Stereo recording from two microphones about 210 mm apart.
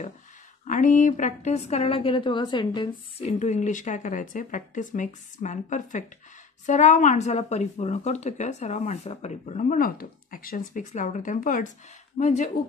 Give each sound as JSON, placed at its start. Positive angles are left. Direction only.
{"t": 0.7, "sound": "a woman's voice", "side_deg": 35}
{"t": 3.3, "sound": "a woman's voice", "side_deg": 35}